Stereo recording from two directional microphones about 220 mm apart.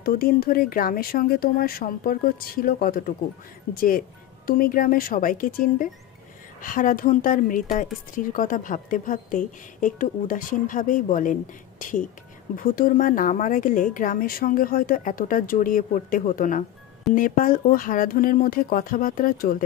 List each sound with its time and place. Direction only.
0.0 s speech: 45° left (ahead or behind)
4.5 s speech: 40° left (ahead or behind)
12.5 s speech: 40° left (ahead or behind)